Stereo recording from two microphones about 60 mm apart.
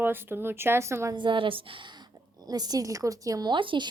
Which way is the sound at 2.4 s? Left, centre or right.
Right.